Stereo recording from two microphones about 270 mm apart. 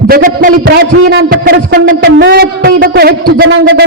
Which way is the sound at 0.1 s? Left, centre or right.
Right.